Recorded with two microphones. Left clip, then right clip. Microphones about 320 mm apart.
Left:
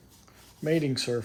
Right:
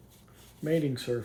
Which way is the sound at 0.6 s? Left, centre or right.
Left.